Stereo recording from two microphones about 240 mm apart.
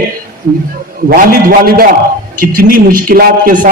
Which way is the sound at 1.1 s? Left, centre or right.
Right.